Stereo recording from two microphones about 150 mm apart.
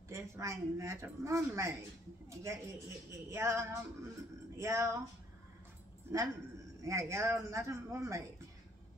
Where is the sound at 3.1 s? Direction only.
20° right (ahead or behind).